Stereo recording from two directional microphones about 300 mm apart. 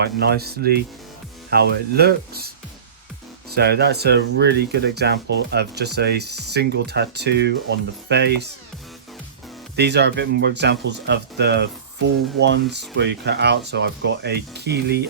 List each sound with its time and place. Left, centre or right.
0.0 s speech: right
3.5 s speech: right
9.7 s speech: right